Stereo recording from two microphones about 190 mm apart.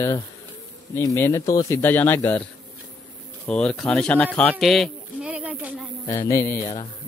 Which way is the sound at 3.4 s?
5° left (ahead or behind).